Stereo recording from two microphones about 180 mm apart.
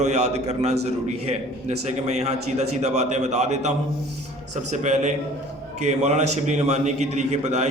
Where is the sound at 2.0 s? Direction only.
40° right (ahead or behind).